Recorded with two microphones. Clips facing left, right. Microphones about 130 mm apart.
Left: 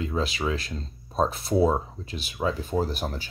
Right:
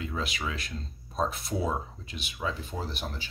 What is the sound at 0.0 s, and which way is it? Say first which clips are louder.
Speech: left 6 dB; 35° left (ahead or behind).